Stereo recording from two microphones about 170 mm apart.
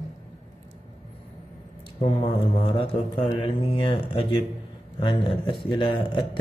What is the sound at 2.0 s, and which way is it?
A man's voice, 30° left (ahead or behind).